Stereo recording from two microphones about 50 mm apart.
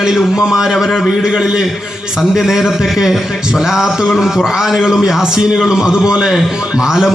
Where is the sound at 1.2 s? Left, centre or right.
Centre.